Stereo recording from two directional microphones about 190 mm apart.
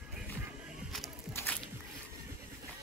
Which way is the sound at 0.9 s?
5° left (ahead or behind).